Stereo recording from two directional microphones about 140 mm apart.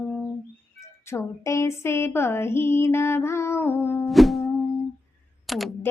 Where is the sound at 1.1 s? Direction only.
20° left (ahead or behind).